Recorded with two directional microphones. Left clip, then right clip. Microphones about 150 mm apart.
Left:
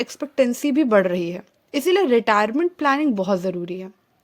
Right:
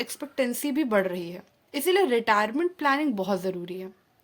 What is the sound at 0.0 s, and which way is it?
A woman's voice, 40° left (ahead or behind).